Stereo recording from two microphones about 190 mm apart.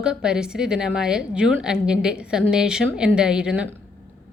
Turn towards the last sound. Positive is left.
turn(degrees=-5)  # may be behind; listen again after turning